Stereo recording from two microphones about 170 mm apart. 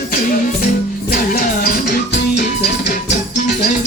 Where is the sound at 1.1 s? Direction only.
55° left (ahead or behind).